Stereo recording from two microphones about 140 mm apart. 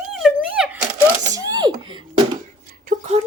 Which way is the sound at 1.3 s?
25° right (ahead or behind).